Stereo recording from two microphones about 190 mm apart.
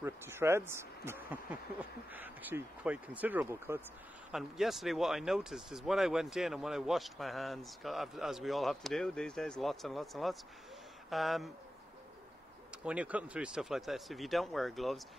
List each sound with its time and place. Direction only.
0.0 s speech: 15° right (ahead or behind)
4.3 s speech: centre (ahead or behind)
12.7 s speech: 5° right (ahead or behind)